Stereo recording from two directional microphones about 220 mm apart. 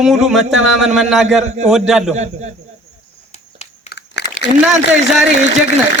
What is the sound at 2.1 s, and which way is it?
Speech, 30° right (ahead or behind).